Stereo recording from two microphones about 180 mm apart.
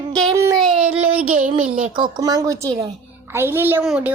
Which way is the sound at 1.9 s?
25° right (ahead or behind).